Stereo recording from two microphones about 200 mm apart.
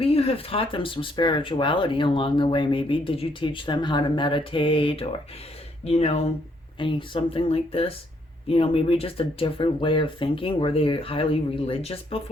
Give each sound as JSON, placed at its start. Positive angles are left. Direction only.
{"t": 0.0, "sound": "speech", "side_deg": 30}